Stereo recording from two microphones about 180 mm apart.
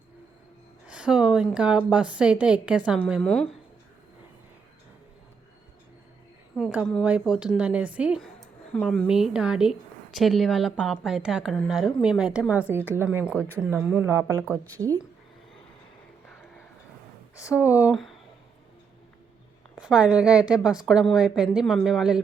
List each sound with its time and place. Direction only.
0.9 s a sound: 5° right (ahead or behind)
1.5 s a woman's voice: 5° right (ahead or behind)
6.6 s a woman's voice: 5° right (ahead or behind)
14.4 s speech: 10° left (ahead or behind)
14.8 s a woman's voice: 20° right (ahead or behind)
16.2 s vehicle: 5° left (ahead or behind)
17.6 s a woman's voice: 10° right (ahead or behind)
19.8 s a woman's voice: 5° right (ahead or behind)